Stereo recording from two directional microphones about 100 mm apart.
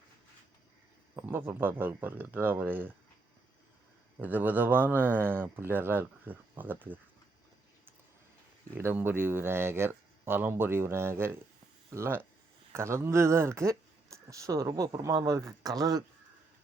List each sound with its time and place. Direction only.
1.1 s speech: 25° right (ahead or behind)
4.2 s a man's voice: 15° right (ahead or behind)
8.7 s speech: 25° right (ahead or behind)